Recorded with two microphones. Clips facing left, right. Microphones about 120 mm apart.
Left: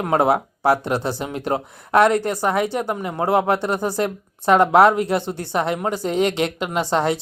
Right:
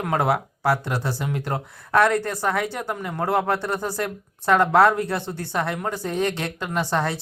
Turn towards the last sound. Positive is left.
turn(degrees=20)  # may be behind; listen again after turning